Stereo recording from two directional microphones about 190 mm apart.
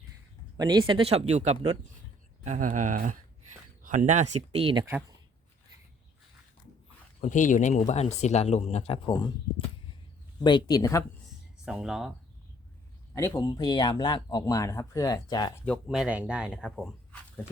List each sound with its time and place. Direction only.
0.5 s speech: 20° right (ahead or behind)
7.2 s speech: 40° left (ahead or behind); by 11.0 s 20° left (ahead or behind)
11.6 s speech: 5° right (ahead or behind)
13.1 s speech: 15° left (ahead or behind)
15.6 s speech: centre (ahead or behind)